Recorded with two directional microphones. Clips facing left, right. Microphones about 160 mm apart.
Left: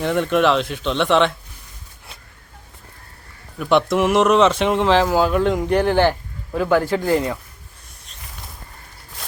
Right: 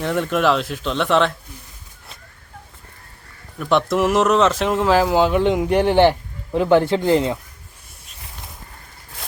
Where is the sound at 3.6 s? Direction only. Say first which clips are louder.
Left 1 dB; centre (ahead or behind).